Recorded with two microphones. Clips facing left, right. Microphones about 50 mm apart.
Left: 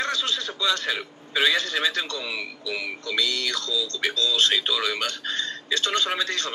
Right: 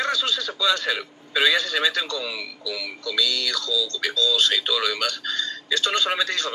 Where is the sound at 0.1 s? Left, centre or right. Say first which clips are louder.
Right 2 dB; left.